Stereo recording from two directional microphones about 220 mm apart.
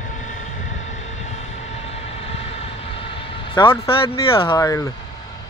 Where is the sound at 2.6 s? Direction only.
25° left (ahead or behind).